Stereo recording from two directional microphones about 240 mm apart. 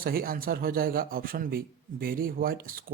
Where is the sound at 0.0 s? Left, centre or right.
Right.